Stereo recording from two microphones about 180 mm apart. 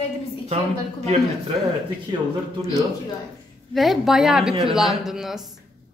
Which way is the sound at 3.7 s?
Centre (ahead or behind).